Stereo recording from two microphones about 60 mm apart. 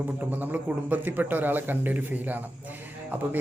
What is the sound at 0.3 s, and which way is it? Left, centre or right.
Speech, right.